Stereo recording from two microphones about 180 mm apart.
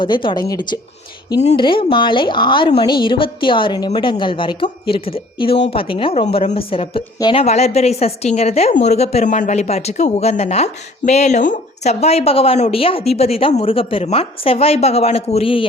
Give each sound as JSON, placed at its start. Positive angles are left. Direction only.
{"t": 0.0, "sound": "a woman's voice", "side_deg": 25}